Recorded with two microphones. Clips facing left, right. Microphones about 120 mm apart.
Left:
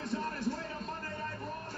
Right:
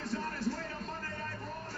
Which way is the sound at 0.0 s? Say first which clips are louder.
Left 1 dB; 20° left (ahead or behind).